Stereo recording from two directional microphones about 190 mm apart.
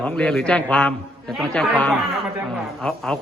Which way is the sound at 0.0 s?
5° left (ahead or behind).